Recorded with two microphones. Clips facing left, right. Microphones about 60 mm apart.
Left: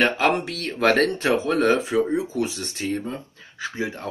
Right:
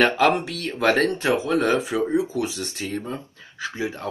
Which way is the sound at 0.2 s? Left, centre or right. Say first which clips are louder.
Right 2 dB; left.